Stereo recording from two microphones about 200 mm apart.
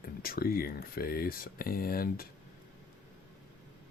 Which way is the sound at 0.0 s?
50° left (ahead or behind).